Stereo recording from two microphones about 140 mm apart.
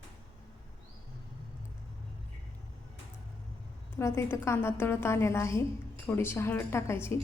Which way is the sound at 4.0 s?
20° left (ahead or behind).